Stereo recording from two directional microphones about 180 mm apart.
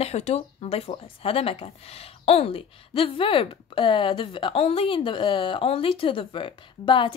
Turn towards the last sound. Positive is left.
turn(degrees=25)  # may be behind; listen again after turning